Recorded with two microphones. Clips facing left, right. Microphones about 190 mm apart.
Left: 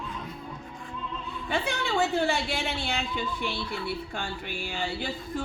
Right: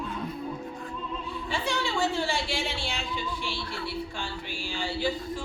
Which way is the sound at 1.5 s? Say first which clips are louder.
Left 2 dB; 60° left (ahead or behind).